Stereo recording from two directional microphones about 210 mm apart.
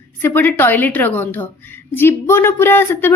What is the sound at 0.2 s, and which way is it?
Speech, 10° left (ahead or behind).